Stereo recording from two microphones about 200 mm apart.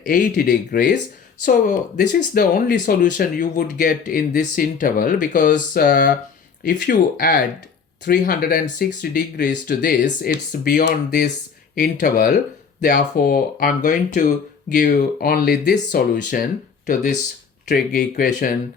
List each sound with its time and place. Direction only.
0.0 s speech: 45° left (ahead or behind)
2.0 s speech: 45° left (ahead or behind)